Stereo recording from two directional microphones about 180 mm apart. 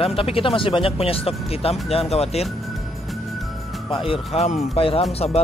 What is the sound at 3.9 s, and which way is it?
Speech, 30° left (ahead or behind).